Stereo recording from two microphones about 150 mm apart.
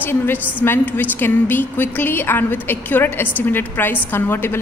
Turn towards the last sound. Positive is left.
turn(degrees=15)  # may be behind; listen again after turning